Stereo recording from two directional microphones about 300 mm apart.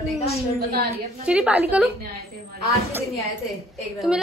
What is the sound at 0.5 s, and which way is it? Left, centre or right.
Speech, right.